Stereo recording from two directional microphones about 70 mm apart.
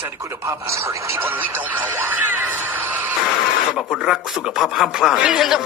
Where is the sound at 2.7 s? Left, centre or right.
Right.